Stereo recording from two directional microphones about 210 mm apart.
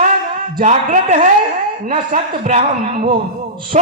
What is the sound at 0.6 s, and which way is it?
A man's voice, 35° right (ahead or behind).